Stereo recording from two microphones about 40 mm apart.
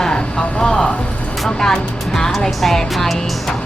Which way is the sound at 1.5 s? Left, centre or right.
Centre.